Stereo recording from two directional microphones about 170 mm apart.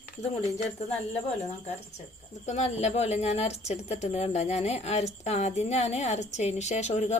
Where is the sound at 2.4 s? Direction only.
40° left (ahead or behind).